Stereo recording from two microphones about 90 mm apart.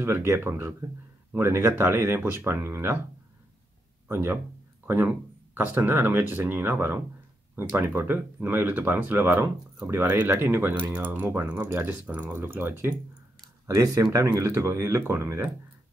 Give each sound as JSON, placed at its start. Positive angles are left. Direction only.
{"t": 0.0, "sound": "speech", "side_deg": -30}
{"t": 4.1, "sound": "speech", "side_deg": -25}
{"t": 14.1, "sound": "speech", "side_deg": -35}